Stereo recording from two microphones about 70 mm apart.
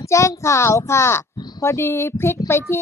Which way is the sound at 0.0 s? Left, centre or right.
Left.